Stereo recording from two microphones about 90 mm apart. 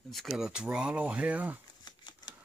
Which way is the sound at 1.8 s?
55° left (ahead or behind).